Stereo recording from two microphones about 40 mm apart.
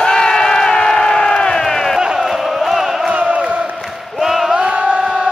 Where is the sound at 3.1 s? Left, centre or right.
Right.